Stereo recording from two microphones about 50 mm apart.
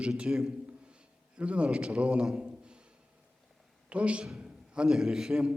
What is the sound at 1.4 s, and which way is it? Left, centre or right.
Speech, right.